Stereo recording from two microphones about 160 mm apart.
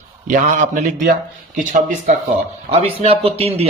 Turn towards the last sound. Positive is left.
turn(degrees=-40)  # may be behind; listen again after turning